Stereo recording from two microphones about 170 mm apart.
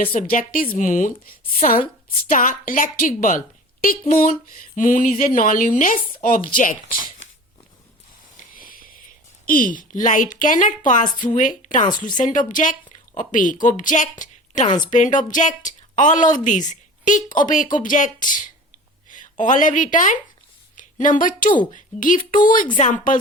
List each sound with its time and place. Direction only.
0.0 s speech: 55° left (ahead or behind)
8.5 s a sound: 55° left (ahead or behind)
9.5 s a woman's voice: 55° left (ahead or behind)